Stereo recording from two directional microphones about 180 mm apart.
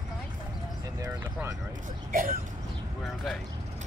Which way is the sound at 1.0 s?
20° right (ahead or behind).